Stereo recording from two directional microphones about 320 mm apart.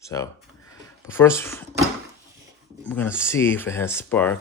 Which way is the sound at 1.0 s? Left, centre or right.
Centre.